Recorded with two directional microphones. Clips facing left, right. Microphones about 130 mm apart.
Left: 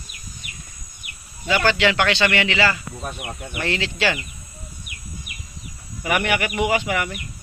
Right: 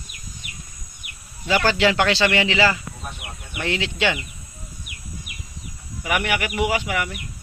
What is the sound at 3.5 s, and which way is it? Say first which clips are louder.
Speech: even; 15° right (ahead or behind).